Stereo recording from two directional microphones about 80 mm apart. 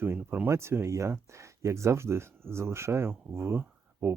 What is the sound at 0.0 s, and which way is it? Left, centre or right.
Speech, right.